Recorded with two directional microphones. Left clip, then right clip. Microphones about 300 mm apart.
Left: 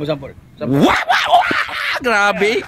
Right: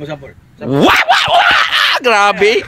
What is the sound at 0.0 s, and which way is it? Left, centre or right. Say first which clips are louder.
Dog: left 4 dB; centre.